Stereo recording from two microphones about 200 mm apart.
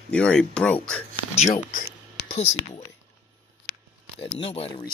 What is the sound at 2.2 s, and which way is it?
Speech, 30° left (ahead or behind).